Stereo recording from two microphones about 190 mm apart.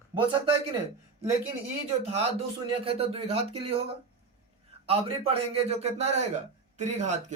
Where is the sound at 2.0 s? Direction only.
30° right (ahead or behind).